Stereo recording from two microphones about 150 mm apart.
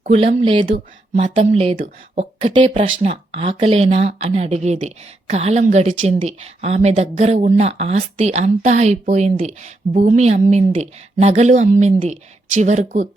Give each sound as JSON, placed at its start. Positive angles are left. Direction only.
{"t": 0.0, "sound": "speech", "side_deg": -40}